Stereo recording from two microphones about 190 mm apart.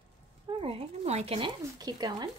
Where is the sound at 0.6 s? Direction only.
30° right (ahead or behind).